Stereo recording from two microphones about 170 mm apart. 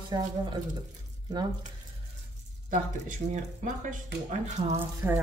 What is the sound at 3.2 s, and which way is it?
Speech, 35° right (ahead or behind).